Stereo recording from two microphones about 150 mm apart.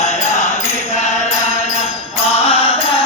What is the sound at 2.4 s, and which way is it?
Mantra, 40° left (ahead or behind).